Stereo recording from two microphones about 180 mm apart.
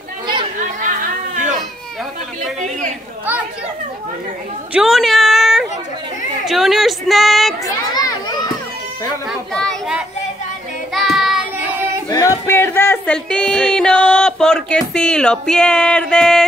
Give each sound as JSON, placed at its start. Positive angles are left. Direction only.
{"t": 0.7, "sound": "chatter", "side_deg": -45}
{"t": 4.7, "sound": "a sound", "side_deg": 0}
{"t": 7.6, "sound": "children playing", "side_deg": 20}
{"t": 9.3, "sound": "children playing", "side_deg": 5}
{"t": 10.9, "sound": "child singing", "side_deg": 0}
{"t": 12.1, "sound": "music", "side_deg": 20}